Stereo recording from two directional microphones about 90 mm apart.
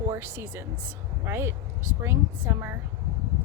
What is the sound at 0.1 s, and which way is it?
Speech, 25° right (ahead or behind).